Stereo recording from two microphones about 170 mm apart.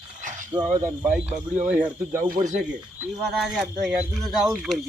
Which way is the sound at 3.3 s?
Centre (ahead or behind).